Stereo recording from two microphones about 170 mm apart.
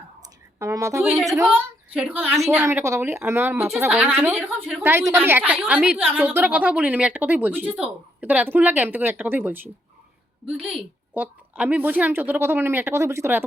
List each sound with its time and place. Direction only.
0.6 s a woman's voice: 20° right (ahead or behind)